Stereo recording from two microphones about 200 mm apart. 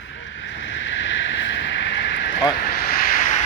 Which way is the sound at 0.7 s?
70° left (ahead or behind).